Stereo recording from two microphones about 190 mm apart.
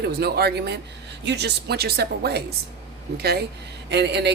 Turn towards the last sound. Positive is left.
turn(degrees=-60)  # may be behind; listen again after turning